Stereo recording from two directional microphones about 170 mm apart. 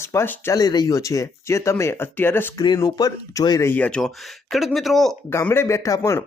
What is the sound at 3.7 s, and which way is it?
Speech, 5° left (ahead or behind).